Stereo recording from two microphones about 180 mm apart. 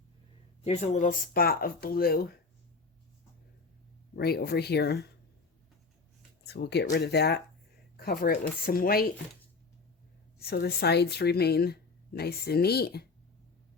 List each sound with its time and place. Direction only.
0.6 s speech: 35° left (ahead or behind); by 2.3 s 55° left (ahead or behind)
4.1 s speech: 60° left (ahead or behind)
6.4 s speech: 65° left (ahead or behind)
10.4 s speech: 60° left (ahead or behind)